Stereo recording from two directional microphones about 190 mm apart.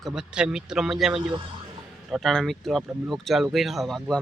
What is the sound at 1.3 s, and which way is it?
Speech, 25° right (ahead or behind).